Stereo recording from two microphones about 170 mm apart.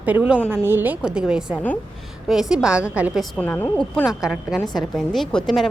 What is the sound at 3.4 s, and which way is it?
Speech, 10° left (ahead or behind).